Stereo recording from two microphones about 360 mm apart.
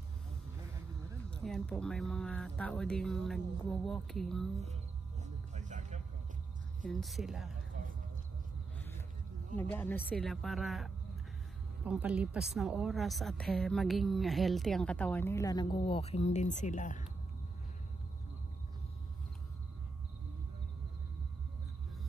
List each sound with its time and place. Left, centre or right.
1.3 s a woman's voice: centre
5.2 s vehicle: centre
6.9 s a woman's voice: centre
8.7 s a sound: centre
9.6 s a woman's voice: centre